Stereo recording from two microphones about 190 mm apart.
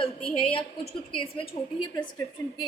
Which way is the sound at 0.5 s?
30° left (ahead or behind).